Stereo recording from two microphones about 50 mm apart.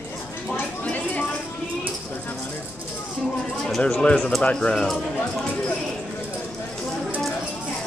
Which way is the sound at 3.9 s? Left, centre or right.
Centre.